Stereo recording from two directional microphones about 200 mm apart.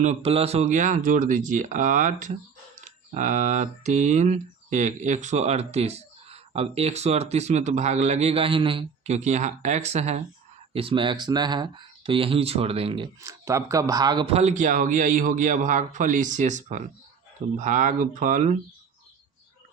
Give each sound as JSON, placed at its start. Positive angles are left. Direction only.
{"t": 0.0, "sound": "speech", "side_deg": -35}
{"t": 13.4, "sound": "speech", "side_deg": -15}